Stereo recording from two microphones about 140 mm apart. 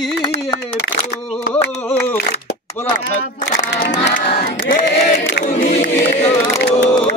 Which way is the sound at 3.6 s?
60° left (ahead or behind).